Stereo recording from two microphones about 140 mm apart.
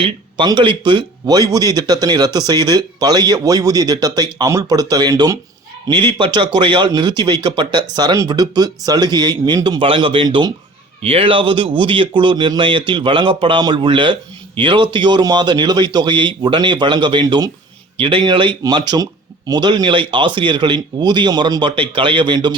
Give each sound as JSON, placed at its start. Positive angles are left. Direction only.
{"t": 0.0, "sound": "a man's voice", "side_deg": -35}